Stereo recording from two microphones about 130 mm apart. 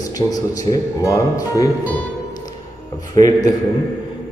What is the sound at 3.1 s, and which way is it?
Speech, 30° left (ahead or behind).